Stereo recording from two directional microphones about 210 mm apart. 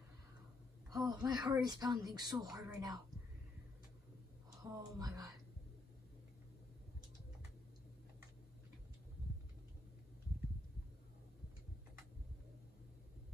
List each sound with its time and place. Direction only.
0.8 s speech: 15° right (ahead or behind)
4.6 s speech: 15° right (ahead or behind)